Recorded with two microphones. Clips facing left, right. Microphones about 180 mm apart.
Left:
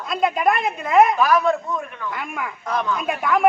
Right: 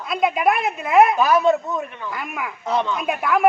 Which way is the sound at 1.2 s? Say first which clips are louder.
Right 2 dB; 25° right (ahead or behind).